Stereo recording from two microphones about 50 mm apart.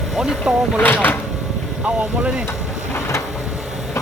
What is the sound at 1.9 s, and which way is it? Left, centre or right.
Vehicle, right.